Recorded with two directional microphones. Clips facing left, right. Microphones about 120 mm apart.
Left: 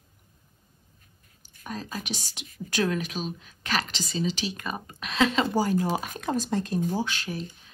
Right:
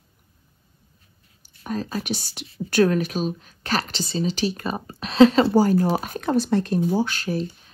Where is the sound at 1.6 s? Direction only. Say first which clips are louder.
Right 7 dB; 45° right (ahead or behind).